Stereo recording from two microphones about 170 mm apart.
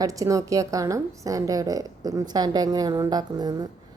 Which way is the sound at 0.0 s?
20° right (ahead or behind).